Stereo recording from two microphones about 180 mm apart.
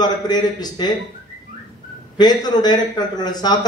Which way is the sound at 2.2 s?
25° left (ahead or behind).